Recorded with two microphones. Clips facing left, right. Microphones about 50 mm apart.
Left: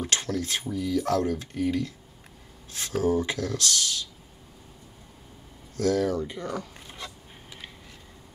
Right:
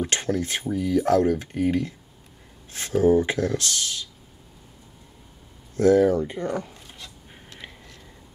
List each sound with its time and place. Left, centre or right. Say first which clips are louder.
0.0 s speech: right 4 dB; right
5.8 s speech: right 7 dB; right